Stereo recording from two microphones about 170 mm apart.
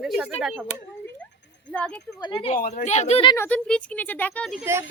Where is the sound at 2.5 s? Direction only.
50° left (ahead or behind).